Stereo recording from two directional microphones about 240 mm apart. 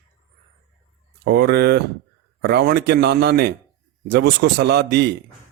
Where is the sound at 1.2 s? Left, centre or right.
Right.